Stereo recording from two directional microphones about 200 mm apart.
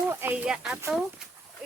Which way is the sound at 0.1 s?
10° right (ahead or behind).